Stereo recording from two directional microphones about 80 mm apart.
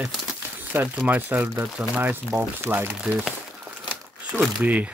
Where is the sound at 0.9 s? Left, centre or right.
Centre.